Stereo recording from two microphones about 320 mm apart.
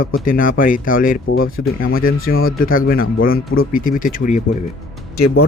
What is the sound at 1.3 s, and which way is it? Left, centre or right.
Speech, left.